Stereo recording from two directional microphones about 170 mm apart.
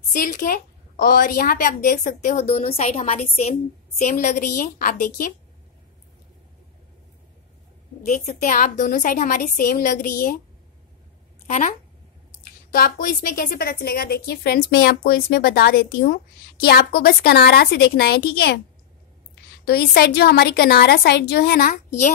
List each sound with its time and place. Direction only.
0.1 s a woman's voice: 55° left (ahead or behind)
8.0 s a woman's voice: 45° left (ahead or behind)
11.4 s speech: 40° left (ahead or behind)
12.7 s a woman's voice: 55° left (ahead or behind)
19.6 s a woman's voice: 65° left (ahead or behind)